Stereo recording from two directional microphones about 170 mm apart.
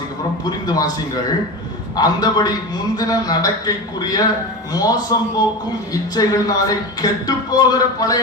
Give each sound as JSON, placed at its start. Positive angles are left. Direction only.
{"t": 0.4, "sound": "a man's voice", "side_deg": 25}